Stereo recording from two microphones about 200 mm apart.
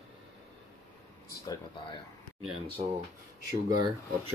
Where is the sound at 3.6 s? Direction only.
20° right (ahead or behind).